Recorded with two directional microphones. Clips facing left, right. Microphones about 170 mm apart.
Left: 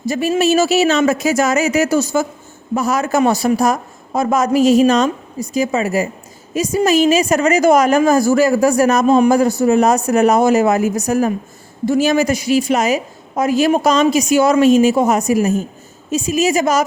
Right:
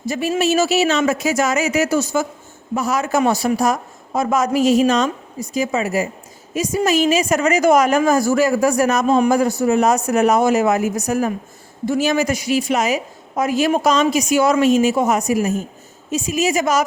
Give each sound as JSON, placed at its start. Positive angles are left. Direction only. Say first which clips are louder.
{"t": 0.1, "sound": "a woman's voice", "louder": "left 3 dB", "side_deg": 40}